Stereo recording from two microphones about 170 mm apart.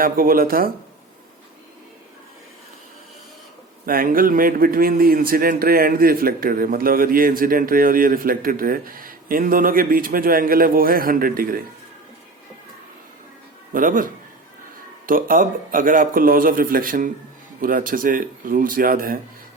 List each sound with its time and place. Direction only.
0.0 s a man's voice: 55° right (ahead or behind)
3.8 s a man's voice: 55° right (ahead or behind)
13.7 s a man's voice: 55° right (ahead or behind)